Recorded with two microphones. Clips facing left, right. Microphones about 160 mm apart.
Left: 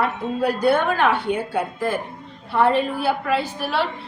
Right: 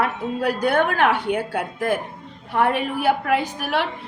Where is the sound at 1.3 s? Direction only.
10° right (ahead or behind).